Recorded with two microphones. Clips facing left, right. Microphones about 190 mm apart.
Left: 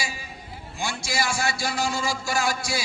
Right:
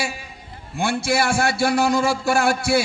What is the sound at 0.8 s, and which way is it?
A man's voice, 60° right (ahead or behind).